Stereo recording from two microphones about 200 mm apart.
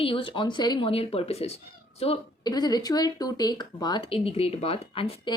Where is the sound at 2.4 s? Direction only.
20° left (ahead or behind).